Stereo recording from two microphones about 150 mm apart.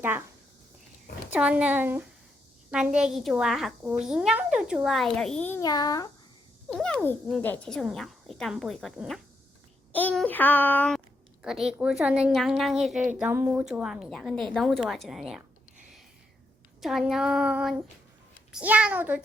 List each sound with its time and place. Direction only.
1.3 s speech: 5° right (ahead or behind); by 5.6 s 15° left (ahead or behind)
5.6 s a child's voice: 25° left (ahead or behind)
6.7 s speech: 5° left (ahead or behind)
9.9 s a child's voice: 10° left (ahead or behind)
13.1 s speech: 10° right (ahead or behind)
16.8 s speech: centre (ahead or behind)